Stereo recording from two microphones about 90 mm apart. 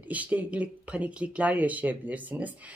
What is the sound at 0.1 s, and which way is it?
Speech, 15° right (ahead or behind).